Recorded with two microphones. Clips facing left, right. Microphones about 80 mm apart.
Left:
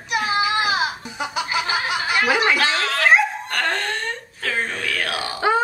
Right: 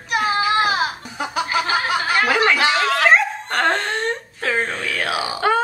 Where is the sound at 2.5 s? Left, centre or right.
Centre.